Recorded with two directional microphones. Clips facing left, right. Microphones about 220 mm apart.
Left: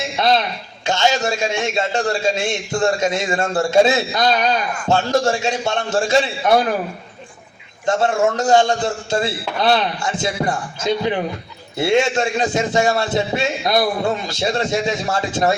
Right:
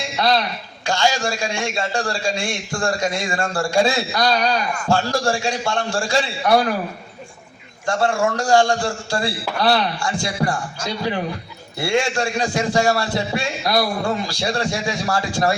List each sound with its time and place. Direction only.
0.2 s a man's voice: 20° left (ahead or behind)
7.9 s a man's voice: 20° left (ahead or behind)